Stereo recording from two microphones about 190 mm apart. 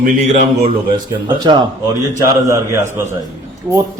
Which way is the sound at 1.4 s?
20° right (ahead or behind).